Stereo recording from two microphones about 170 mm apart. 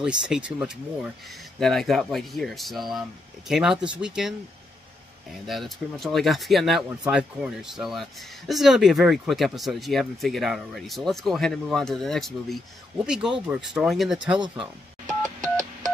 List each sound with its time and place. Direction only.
0.0 s speech: 5° right (ahead or behind)
5.5 s speech: centre (ahead or behind)
14.4 s telephone dialing: 25° right (ahead or behind)